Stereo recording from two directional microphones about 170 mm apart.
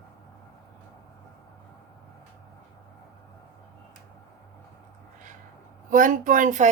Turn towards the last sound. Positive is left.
turn(degrees=-50)  # may be behind; listen again after turning